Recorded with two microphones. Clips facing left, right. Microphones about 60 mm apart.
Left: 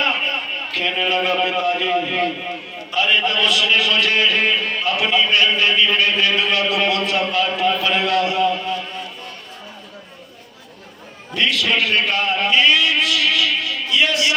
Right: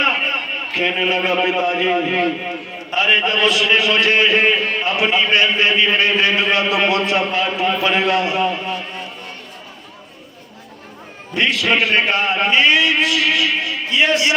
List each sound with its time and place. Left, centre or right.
0.0 s a man's voice: right
11.3 s a man's voice: right